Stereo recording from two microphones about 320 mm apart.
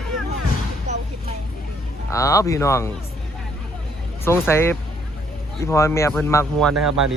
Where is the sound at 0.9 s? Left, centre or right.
Right.